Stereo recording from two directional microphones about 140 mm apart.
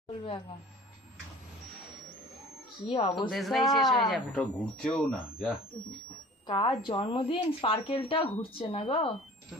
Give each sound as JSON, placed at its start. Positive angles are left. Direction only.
{"t": 2.9, "sound": "speech", "side_deg": 45}
{"t": 3.2, "sound": "speech", "side_deg": 0}
{"t": 6.5, "sound": "speech", "side_deg": 35}